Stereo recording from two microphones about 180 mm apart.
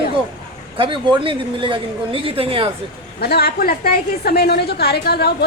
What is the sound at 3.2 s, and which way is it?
A woman's voice, 60° left (ahead or behind).